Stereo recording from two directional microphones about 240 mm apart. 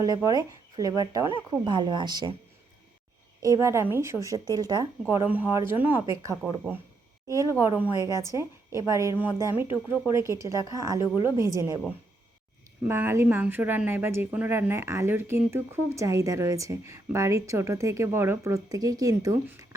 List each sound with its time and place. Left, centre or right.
0.0 s a woman's voice: centre
3.4 s a woman's voice: centre
7.3 s a woman's voice: centre
7.6 s a woman's voice: centre
8.9 s a woman's voice: centre
12.8 s a woman's voice: centre